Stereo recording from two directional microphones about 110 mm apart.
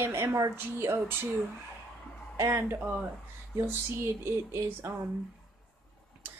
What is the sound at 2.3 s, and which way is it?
Speech, 25° right (ahead or behind).